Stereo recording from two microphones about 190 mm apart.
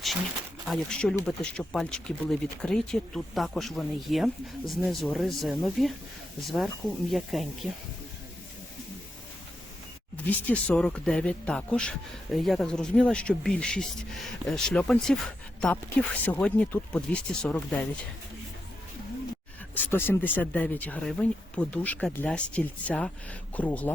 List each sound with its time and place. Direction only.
0.7 s speech: 5° left (ahead or behind)
10.2 s speech: 5° left (ahead or behind)
19.7 s speech: 10° left (ahead or behind)